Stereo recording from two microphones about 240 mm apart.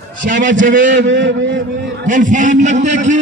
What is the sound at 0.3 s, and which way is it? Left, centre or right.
Speech, right.